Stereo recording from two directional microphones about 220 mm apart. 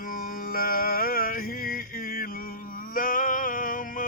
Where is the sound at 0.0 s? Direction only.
40° left (ahead or behind).